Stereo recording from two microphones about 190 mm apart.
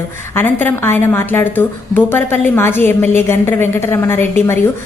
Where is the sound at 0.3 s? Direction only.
10° left (ahead or behind).